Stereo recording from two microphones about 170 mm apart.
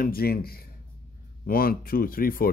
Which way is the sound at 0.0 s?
60° left (ahead or behind).